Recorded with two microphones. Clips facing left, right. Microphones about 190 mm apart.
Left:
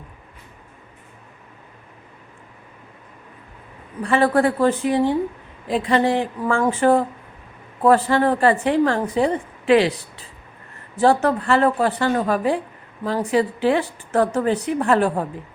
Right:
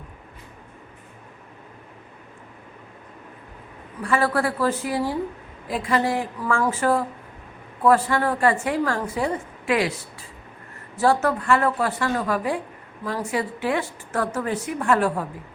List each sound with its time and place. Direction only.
4.0 s a woman's voice: 25° left (ahead or behind)
11.0 s a woman's voice: 30° left (ahead or behind)